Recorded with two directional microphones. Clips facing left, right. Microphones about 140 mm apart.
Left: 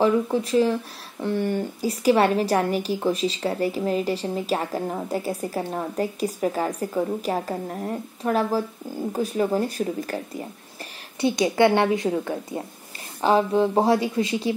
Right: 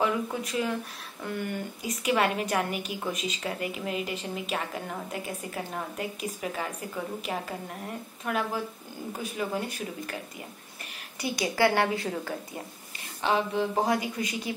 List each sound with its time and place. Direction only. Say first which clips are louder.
0.0 s a woman's voice: left 8 dB; 30° left (ahead or behind)
11.1 s a woman's voice: left 7 dB; 25° left (ahead or behind)
13.2 s a woman's voice: left 7 dB; 35° left (ahead or behind)